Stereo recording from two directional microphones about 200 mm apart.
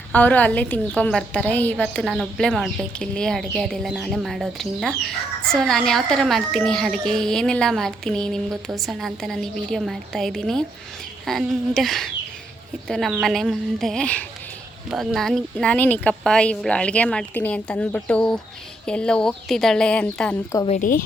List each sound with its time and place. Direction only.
0.1 s a woman's voice: 10° left (ahead or behind)
20.7 s a woman's voice: 40° left (ahead or behind)